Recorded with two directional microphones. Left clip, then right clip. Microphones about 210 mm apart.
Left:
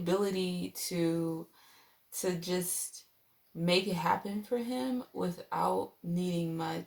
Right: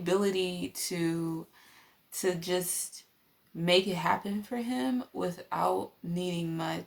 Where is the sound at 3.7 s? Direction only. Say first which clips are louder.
Right 3 dB; 40° right (ahead or behind).